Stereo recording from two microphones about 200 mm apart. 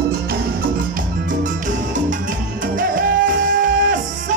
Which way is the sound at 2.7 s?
45° right (ahead or behind).